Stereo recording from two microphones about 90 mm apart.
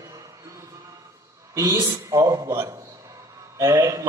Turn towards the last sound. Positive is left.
turn(degrees=-35)  # may be behind; listen again after turning